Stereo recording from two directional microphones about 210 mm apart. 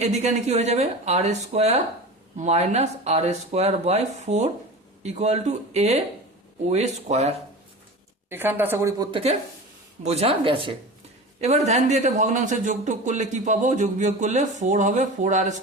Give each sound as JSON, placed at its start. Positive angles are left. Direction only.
{"t": 0.0, "sound": "a man's voice", "side_deg": -30}
{"t": 8.3, "sound": "speech", "side_deg": -10}
{"t": 10.0, "sound": "a man's voice", "side_deg": -30}